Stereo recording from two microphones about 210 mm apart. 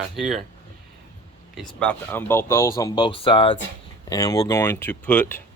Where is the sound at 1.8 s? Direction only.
10° left (ahead or behind).